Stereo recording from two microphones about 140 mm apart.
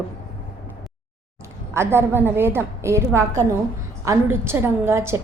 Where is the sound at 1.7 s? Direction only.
20° right (ahead or behind).